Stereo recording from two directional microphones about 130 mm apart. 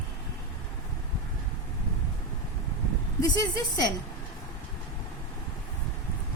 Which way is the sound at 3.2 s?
30° left (ahead or behind).